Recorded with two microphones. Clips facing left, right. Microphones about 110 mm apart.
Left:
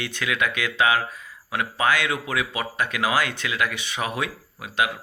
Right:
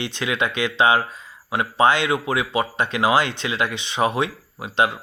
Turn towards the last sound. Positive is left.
turn(degrees=-30)  # may be behind; listen again after turning